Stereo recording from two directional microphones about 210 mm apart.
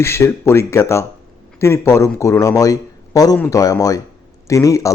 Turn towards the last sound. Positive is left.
turn(degrees=15)  # may be behind; listen again after turning